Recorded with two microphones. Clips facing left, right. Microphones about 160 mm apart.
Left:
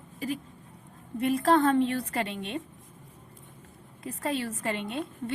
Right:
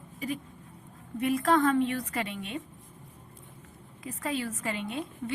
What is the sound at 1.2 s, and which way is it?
A woman's voice, 30° left (ahead or behind).